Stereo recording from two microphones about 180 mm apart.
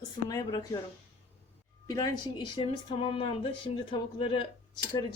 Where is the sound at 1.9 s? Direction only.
20° left (ahead or behind).